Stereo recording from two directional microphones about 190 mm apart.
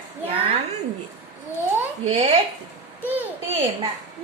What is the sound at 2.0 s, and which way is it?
Speech, 35° right (ahead or behind).